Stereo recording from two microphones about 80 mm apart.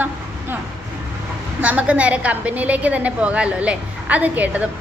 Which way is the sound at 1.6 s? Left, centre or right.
Centre.